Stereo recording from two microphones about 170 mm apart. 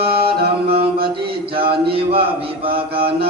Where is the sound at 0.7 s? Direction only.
30° right (ahead or behind).